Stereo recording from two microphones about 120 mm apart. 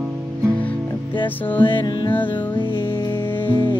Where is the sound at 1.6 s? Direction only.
40° left (ahead or behind).